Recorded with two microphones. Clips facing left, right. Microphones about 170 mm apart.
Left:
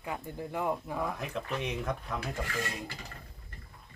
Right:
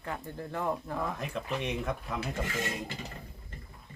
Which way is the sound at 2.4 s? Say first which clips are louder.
Right 2 dB; 20° right (ahead or behind).